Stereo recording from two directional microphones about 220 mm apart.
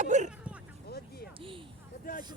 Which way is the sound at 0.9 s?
45° left (ahead or behind).